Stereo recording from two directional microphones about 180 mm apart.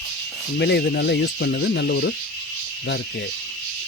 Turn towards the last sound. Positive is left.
turn(degrees=65)  # may be behind; listen again after turning